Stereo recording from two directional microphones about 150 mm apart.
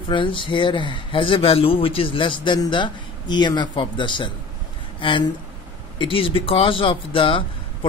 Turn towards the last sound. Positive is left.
turn(degrees=35)  # may be behind; listen again after turning